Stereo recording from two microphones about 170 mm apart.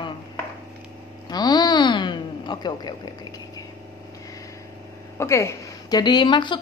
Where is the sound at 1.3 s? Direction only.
25° left (ahead or behind).